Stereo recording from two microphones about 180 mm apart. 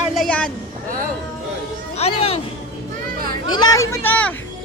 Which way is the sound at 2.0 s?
35° left (ahead or behind).